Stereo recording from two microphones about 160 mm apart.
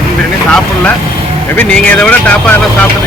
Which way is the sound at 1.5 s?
10° left (ahead or behind).